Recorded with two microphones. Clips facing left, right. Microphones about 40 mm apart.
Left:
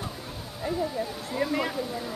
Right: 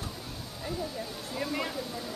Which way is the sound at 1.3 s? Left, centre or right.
Left.